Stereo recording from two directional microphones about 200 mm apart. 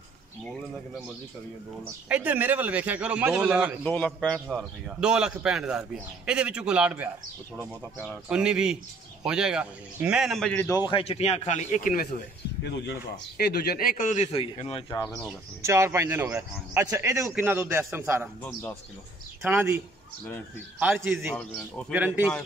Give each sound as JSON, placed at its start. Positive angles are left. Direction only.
{"t": 2.0, "sound": "speech", "side_deg": -5}
{"t": 3.8, "sound": "a man's voice", "side_deg": 5}
{"t": 7.5, "sound": "a man's voice", "side_deg": 5}
{"t": 10.9, "sound": "a man's voice", "side_deg": 30}
{"t": 12.6, "sound": "a man's voice", "side_deg": 60}
{"t": 15.6, "sound": "speech", "side_deg": -15}
{"t": 18.4, "sound": "a man's voice", "side_deg": 5}
{"t": 19.4, "sound": "speech", "side_deg": -10}
{"t": 20.8, "sound": "a man's voice", "side_deg": -5}